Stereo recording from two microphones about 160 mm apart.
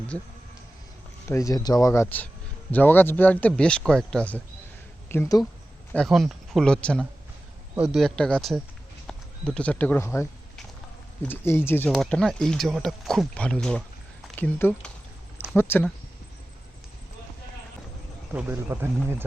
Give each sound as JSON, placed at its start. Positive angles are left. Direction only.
{"t": 1.3, "sound": "speech", "side_deg": 20}
{"t": 5.9, "sound": "speech", "side_deg": 0}
{"t": 11.9, "sound": "speech", "side_deg": 5}
{"t": 18.3, "sound": "speech", "side_deg": -15}